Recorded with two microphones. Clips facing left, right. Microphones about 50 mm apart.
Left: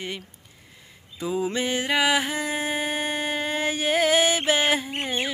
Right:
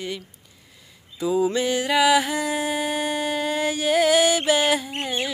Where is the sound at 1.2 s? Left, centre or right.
Left.